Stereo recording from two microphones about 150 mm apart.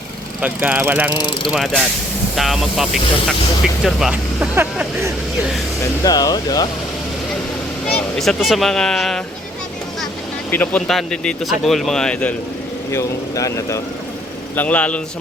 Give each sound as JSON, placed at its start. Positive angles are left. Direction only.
{"t": 0.4, "sound": "speech", "side_deg": -10}
{"t": 1.5, "sound": "speech", "side_deg": 0}
{"t": 6.0, "sound": "speech", "side_deg": 25}
{"t": 7.9, "sound": "speech", "side_deg": 5}
{"t": 10.5, "sound": "speech", "side_deg": 10}
{"t": 12.9, "sound": "a man's voice", "side_deg": 20}